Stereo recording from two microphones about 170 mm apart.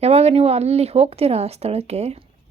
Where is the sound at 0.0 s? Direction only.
35° right (ahead or behind).